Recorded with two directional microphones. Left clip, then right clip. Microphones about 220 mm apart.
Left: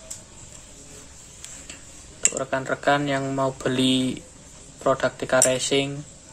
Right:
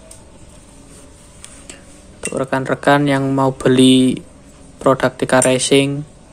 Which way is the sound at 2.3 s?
25° right (ahead or behind).